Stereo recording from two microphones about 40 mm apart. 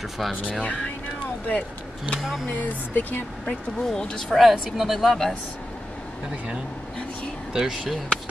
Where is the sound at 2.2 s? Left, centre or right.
Centre.